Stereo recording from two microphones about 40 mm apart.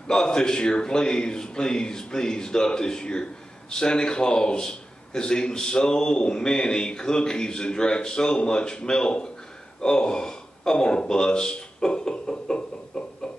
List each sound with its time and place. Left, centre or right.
0.1 s a man's voice: centre